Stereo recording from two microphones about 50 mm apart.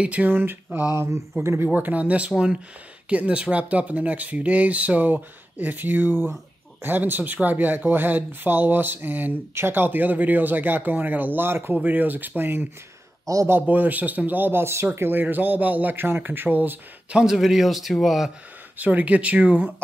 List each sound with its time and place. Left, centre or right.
0.0 s speech: right
0.3 s a sound: right
0.7 s speech: right
1.7 s speech: right
9.5 s speech: right
15.0 s speech: right
17.1 s speech: centre
18.8 s speech: right